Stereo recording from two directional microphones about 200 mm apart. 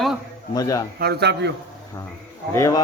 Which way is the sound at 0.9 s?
55° right (ahead or behind).